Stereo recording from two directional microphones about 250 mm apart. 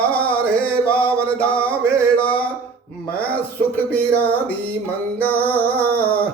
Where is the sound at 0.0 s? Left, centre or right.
Centre.